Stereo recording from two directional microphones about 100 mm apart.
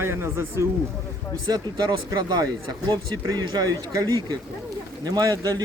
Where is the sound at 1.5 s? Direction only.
50° right (ahead or behind).